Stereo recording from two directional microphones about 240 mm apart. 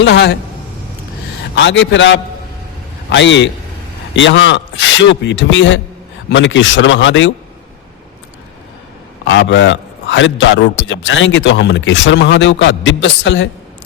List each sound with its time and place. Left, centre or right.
0.0 s a man's voice: left
1.5 s a man's voice: left
9.2 s a man's voice: left